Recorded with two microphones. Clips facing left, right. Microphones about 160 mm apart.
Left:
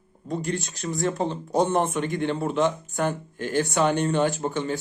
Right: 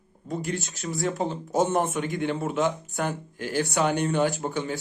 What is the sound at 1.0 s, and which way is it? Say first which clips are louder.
A man's voice: left 2 dB; 15° right (ahead or behind).